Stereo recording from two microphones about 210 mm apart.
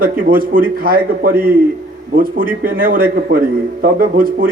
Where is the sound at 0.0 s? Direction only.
40° right (ahead or behind).